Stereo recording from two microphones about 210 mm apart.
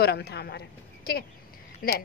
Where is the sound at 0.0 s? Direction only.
50° left (ahead or behind).